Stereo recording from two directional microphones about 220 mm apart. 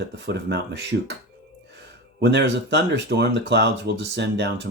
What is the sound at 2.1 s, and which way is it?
Speech, 50° right (ahead or behind).